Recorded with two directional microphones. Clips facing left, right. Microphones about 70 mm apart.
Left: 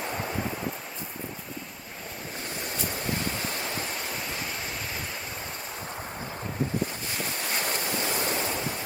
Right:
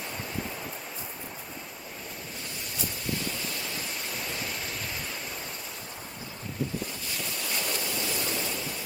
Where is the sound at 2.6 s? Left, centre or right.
Left.